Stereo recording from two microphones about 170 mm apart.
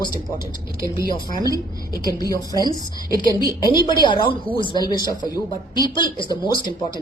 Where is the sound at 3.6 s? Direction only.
25° left (ahead or behind).